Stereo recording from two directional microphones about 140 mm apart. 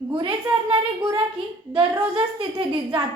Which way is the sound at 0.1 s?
40° right (ahead or behind).